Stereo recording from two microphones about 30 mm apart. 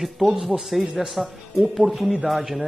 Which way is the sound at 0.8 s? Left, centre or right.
Right.